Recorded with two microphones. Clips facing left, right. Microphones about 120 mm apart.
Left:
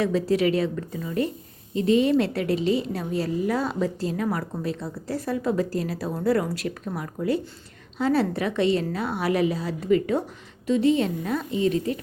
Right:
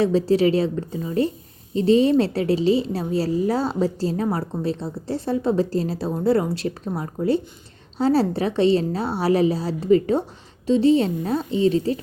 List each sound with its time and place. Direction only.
0.0 s a woman's voice: 30° right (ahead or behind)